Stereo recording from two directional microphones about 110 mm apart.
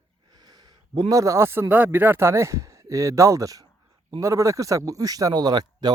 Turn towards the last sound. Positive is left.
turn(degrees=-40)  # may be behind; listen again after turning